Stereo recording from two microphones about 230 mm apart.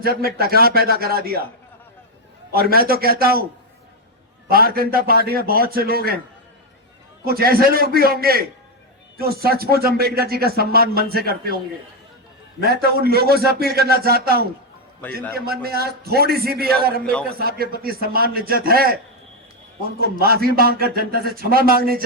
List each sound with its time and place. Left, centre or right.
0.0 s speech: right
2.5 s speech: right
4.4 s speech: right
7.3 s speech: right
12.6 s a man's voice: right
20.0 s speech: right